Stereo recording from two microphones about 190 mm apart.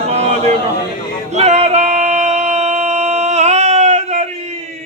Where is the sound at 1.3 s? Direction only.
35° right (ahead or behind).